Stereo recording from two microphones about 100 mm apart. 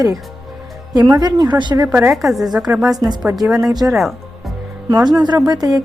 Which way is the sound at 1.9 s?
25° right (ahead or behind).